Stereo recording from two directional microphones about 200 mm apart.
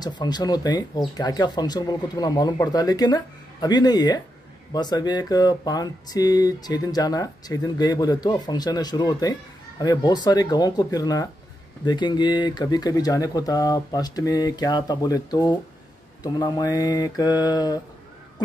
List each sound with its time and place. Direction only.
0.0 s speech: 20° left (ahead or behind)